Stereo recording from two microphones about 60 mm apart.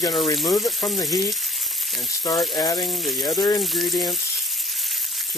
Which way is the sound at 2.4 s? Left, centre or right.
Centre.